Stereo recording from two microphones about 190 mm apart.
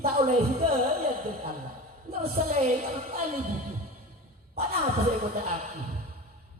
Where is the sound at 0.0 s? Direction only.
45° right (ahead or behind).